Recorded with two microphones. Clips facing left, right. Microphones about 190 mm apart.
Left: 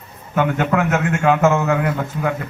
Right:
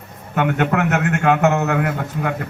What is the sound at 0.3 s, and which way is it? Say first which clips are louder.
A man's voice: even; 60° right (ahead or behind).